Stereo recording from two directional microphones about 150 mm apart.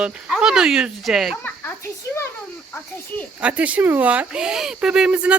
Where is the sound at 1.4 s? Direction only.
15° left (ahead or behind).